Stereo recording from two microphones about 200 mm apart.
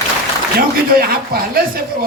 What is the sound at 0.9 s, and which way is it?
Speech, 50° right (ahead or behind).